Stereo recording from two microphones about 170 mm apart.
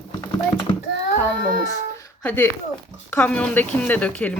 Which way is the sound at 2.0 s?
15° left (ahead or behind).